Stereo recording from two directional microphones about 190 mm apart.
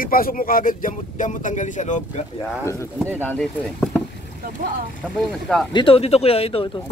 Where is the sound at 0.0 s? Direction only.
50° left (ahead or behind).